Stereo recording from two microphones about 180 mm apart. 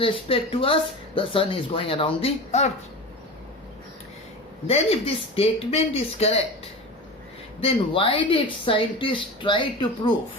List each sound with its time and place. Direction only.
0.0 s speech: 30° left (ahead or behind)
4.6 s speech: 35° left (ahead or behind)
7.6 s speech: 30° left (ahead or behind)